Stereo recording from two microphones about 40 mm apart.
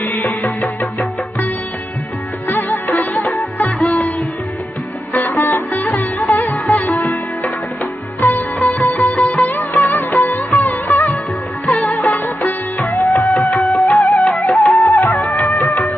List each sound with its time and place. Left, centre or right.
0.0 s music: left
2.5 s music: left
5.1 s sitar: left
8.2 s music: left